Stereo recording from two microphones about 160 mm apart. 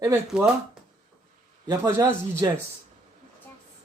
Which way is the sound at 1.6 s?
20° right (ahead or behind).